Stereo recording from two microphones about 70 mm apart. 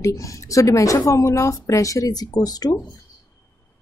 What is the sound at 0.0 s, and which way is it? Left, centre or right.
A woman's voice, left.